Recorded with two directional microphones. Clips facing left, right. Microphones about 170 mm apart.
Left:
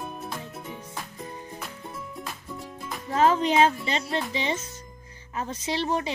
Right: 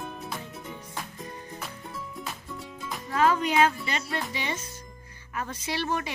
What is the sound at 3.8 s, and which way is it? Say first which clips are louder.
A woman's voice: left 3 dB; 25° left (ahead or behind).